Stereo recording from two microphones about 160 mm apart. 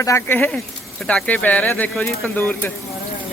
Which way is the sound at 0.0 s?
20° left (ahead or behind).